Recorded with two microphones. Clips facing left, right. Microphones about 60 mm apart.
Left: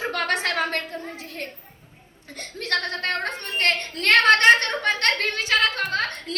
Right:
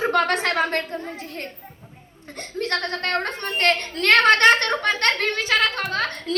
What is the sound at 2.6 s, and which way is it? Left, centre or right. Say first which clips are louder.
A woman's voice: right 1 dB; right.